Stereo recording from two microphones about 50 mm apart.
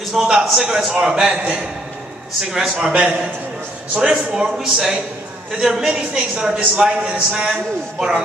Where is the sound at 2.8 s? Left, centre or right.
Right.